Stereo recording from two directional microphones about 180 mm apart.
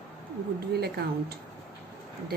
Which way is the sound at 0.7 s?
60° right (ahead or behind).